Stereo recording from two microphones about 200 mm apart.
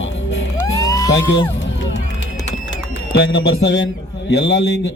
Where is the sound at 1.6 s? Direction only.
65° left (ahead or behind).